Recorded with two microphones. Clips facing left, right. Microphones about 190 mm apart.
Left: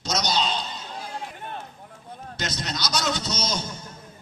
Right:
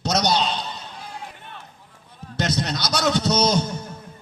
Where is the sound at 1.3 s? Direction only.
50° left (ahead or behind).